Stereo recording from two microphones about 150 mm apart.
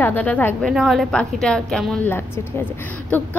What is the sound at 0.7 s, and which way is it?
A woman's voice, centre (ahead or behind).